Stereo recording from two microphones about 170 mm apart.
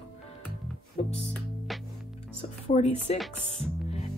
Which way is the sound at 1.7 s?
Centre (ahead or behind).